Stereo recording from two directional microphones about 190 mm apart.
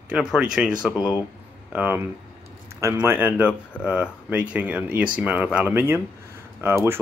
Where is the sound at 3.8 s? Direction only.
5° left (ahead or behind).